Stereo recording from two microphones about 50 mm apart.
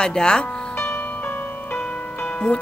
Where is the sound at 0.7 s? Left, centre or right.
Left.